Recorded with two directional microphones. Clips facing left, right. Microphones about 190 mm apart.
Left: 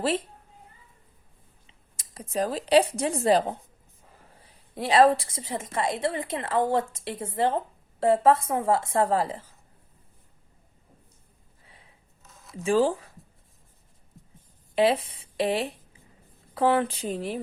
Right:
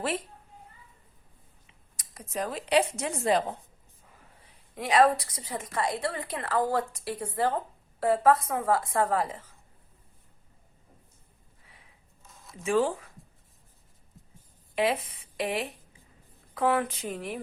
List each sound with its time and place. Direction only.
1.6 s speech: 30° left (ahead or behind)
4.7 s a woman's voice: 30° left (ahead or behind)
12.6 s speech: 30° left (ahead or behind)
14.8 s speech: 30° left (ahead or behind)